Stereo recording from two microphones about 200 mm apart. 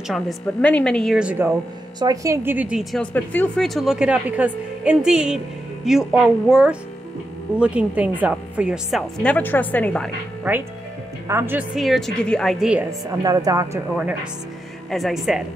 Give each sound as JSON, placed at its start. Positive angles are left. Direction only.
{"t": 0.1, "sound": "a woman's voice", "side_deg": 5}
{"t": 2.0, "sound": "a woman's voice", "side_deg": -15}
{"t": 10.5, "sound": "a woman's voice", "side_deg": -10}
{"t": 13.2, "sound": "speech", "side_deg": -20}
{"t": 14.9, "sound": "a woman's voice", "side_deg": 0}